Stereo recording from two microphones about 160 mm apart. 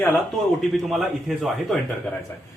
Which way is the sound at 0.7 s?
Centre (ahead or behind).